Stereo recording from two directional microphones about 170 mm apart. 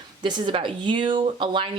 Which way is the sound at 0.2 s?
25° right (ahead or behind).